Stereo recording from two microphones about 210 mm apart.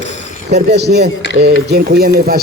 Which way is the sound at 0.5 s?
55° right (ahead or behind).